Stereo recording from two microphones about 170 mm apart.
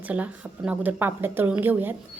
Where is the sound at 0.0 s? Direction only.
10° right (ahead or behind).